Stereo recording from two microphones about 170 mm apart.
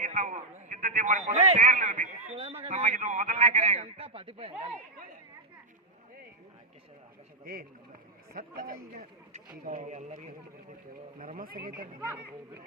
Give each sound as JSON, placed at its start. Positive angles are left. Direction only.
{"t": 0.0, "sound": "a man's voice", "side_deg": -50}
{"t": 3.4, "sound": "a man's voice", "side_deg": -30}
{"t": 7.4, "sound": "a man's voice", "side_deg": -60}
{"t": 9.6, "sound": "a man's voice", "side_deg": -50}
{"t": 11.2, "sound": "a man's voice", "side_deg": -55}
{"t": 11.9, "sound": "speech", "side_deg": -15}